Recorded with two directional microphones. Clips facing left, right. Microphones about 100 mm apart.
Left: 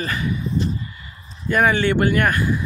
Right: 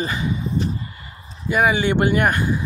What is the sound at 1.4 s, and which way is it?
Speech, 10° right (ahead or behind).